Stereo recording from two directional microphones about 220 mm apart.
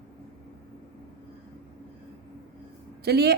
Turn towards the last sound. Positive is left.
turn(degrees=-45)  # may be behind; listen again after turning